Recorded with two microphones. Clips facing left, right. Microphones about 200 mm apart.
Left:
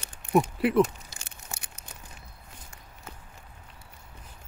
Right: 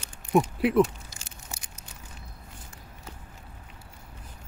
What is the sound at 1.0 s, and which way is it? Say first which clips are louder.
Tearing: even; 60° left (ahead or behind).